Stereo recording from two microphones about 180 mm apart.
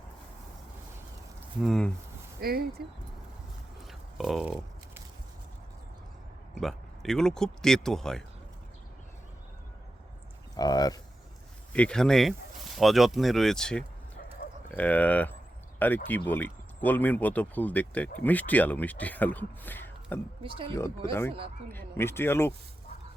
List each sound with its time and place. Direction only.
1.6 s speech: centre (ahead or behind)
2.4 s speech: 55° right (ahead or behind)
3.8 s biting: centre (ahead or behind)
6.5 s speech: centre (ahead or behind)
10.6 s speech: 20° left (ahead or behind)
11.7 s speech: 5° left (ahead or behind)
20.4 s speech: 30° right (ahead or behind)
21.1 s speech: 10° left (ahead or behind)